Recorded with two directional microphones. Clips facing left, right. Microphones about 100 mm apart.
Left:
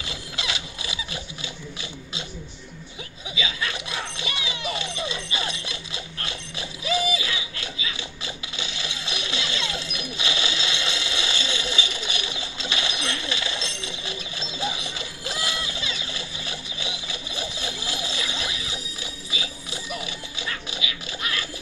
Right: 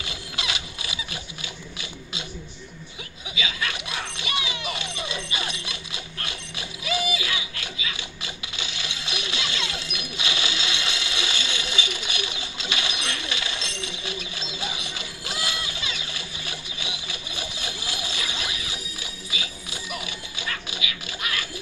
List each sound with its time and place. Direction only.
0.0 s zipper: 30° left (ahead or behind)
3.3 s children playing: 30° left (ahead or behind)